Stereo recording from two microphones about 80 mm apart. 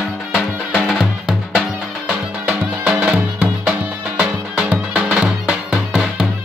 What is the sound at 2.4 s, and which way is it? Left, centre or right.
Music, centre.